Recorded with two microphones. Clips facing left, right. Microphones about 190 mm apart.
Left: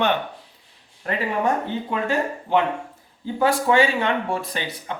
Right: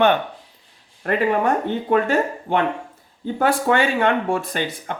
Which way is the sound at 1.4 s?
55° right (ahead or behind).